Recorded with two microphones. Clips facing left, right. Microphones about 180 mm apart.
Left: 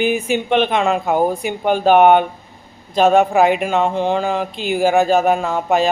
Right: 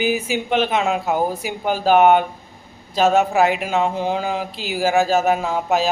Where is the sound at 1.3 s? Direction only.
5° right (ahead or behind).